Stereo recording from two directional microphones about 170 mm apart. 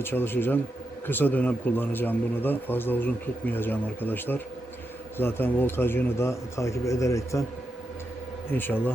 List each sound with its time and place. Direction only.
0.0 s speech: 10° left (ahead or behind)
8.4 s speech: 10° left (ahead or behind)